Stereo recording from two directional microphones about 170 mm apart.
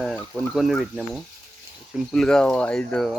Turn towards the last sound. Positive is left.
turn(degrees=5)  # may be behind; listen again after turning